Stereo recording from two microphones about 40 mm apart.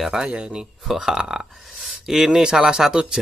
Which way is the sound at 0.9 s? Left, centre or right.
Centre.